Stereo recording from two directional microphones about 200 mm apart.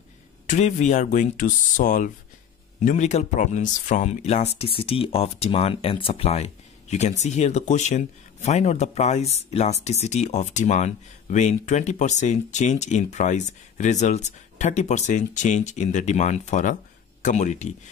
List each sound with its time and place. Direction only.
0.5 s speech: 35° left (ahead or behind)